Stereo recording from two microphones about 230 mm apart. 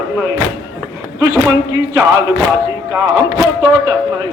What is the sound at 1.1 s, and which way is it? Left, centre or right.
Speech, centre.